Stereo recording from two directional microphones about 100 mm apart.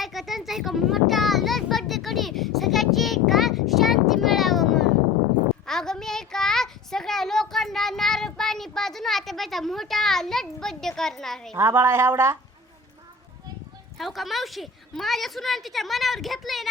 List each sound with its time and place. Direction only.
0.0 s a sound: centre (ahead or behind)
11.5 s a woman's voice: 25° right (ahead or behind)
14.0 s a woman's voice: centre (ahead or behind)